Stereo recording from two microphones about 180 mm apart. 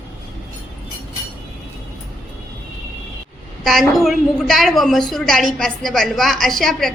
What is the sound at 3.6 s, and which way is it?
A woman's voice, centre (ahead or behind).